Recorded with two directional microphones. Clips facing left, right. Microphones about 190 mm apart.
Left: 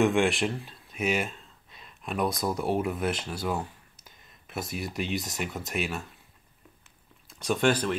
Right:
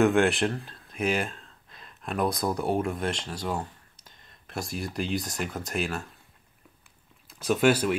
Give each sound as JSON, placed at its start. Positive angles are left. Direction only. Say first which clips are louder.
{"t": 0.0, "sound": "speech", "louder": "right 2 dB", "side_deg": 0}
{"t": 7.2, "sound": "speech", "louder": "right 3 dB", "side_deg": 0}